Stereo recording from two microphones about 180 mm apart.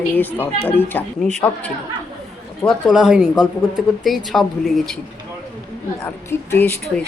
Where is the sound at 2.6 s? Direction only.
Centre (ahead or behind).